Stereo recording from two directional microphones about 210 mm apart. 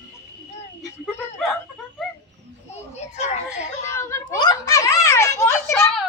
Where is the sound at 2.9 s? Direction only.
30° left (ahead or behind).